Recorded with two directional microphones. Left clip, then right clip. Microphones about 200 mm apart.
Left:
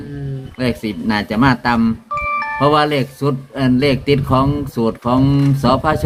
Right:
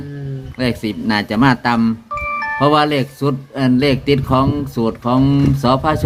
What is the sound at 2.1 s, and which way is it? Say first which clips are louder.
Music: left 3 dB; 15° left (ahead or behind).